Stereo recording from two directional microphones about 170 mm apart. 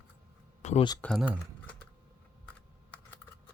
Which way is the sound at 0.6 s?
45° left (ahead or behind).